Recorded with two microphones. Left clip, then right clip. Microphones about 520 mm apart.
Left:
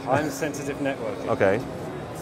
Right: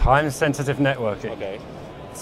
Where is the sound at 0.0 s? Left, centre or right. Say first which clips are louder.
Right 6 dB; right.